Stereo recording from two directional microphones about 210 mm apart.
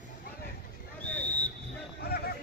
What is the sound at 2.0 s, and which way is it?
Basketball bounce, 45° left (ahead or behind).